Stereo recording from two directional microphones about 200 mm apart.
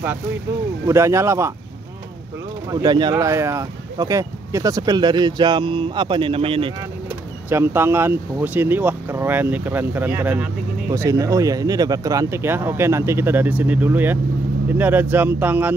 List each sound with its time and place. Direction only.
0.8 s speech: 15° right (ahead or behind)
2.7 s speech: 20° right (ahead or behind)
7.4 s speech: 10° right (ahead or behind)